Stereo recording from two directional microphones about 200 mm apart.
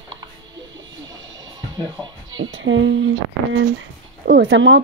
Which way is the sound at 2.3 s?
75° right (ahead or behind).